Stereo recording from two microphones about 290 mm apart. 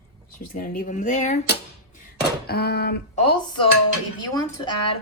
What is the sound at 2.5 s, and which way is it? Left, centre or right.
Speech, left.